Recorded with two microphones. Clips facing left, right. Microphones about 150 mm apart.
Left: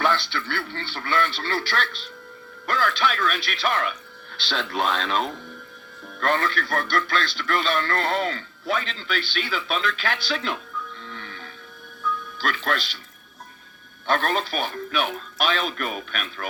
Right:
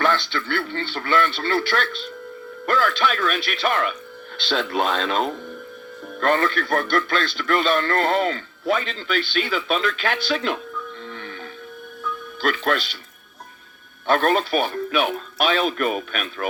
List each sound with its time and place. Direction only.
0.0 s a sound: 50° right (ahead or behind)
0.3 s speech: 55° right (ahead or behind)
11.0 s music: 50° right (ahead or behind)
12.4 s speech: 50° right (ahead or behind)
14.1 s speech: 50° right (ahead or behind)